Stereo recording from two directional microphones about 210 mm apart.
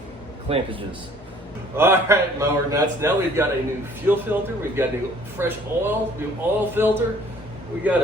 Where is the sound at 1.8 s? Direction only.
10° right (ahead or behind).